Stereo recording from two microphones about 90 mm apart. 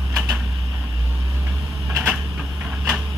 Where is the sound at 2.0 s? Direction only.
20° right (ahead or behind).